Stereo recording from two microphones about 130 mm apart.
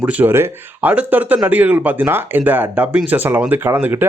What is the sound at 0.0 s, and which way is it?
Speech, 10° right (ahead or behind).